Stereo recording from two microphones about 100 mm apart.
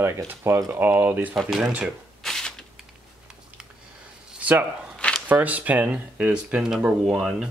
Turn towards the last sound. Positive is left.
turn(degrees=-5)  # may be behind; listen again after turning